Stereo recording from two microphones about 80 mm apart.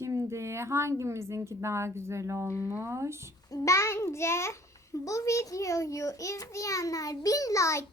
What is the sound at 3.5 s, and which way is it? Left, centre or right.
A child's voice, left.